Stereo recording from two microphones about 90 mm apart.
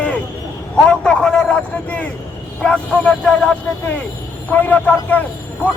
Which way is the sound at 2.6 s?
10° left (ahead or behind).